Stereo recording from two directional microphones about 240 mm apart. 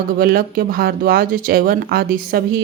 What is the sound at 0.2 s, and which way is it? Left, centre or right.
Speech, right.